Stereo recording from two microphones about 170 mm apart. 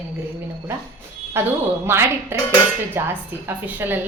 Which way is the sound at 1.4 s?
15° right (ahead or behind).